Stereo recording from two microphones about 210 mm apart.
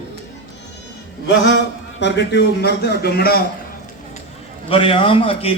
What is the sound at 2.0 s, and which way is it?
A man's voice, 55° left (ahead or behind).